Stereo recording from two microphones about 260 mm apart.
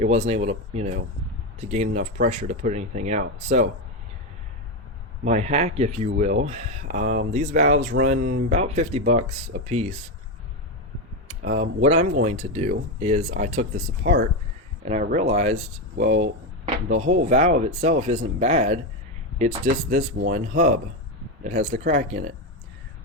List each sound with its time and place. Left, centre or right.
0.0 s speech: right
5.2 s speech: right
11.5 s speech: right
14.0 s speech: right
14.8 s speech: right